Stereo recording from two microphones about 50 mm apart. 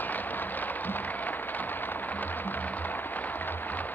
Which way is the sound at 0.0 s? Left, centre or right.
Left.